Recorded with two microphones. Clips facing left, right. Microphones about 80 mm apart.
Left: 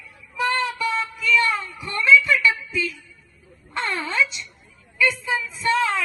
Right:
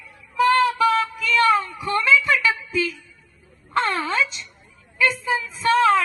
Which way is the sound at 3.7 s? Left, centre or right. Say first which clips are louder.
Right 3 dB; right.